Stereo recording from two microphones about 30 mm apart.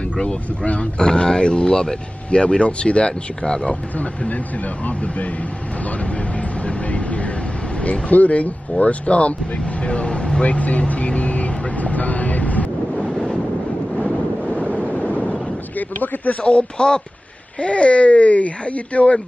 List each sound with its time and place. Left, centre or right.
0.9 s speech: left
2.3 s speech: left
3.4 s speech: left
4.8 s speech: left
7.8 s speech: left
10.4 s speech: left
12.9 s wind noise: centre
14.8 s vehicle: left
16.4 s speech: left
17.6 s speech: left